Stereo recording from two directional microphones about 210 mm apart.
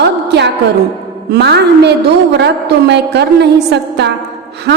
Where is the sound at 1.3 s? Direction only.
55° right (ahead or behind).